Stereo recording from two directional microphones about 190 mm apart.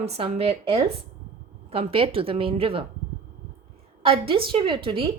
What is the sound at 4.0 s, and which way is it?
A woman's voice, 30° right (ahead or behind).